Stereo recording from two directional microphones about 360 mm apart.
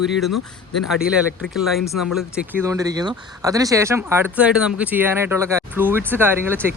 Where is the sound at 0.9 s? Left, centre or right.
Centre.